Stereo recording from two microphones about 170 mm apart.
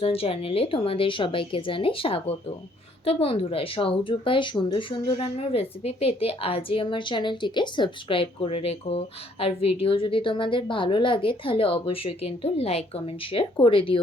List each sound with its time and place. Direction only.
0.0 s speech: 35° left (ahead or behind)